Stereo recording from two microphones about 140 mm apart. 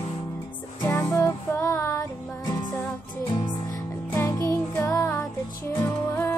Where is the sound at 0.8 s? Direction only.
20° left (ahead or behind).